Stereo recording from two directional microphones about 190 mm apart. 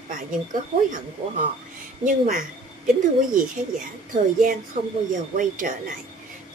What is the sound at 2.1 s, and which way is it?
Speech, 45° right (ahead or behind).